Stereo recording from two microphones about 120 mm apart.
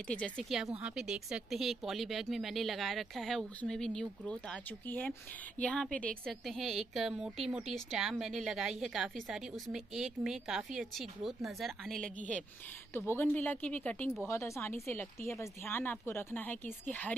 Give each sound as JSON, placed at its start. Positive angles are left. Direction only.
{"t": 0.0, "sound": "speech", "side_deg": 10}
{"t": 0.7, "sound": "a woman's voice", "side_deg": -5}
{"t": 12.9, "sound": "speech", "side_deg": 20}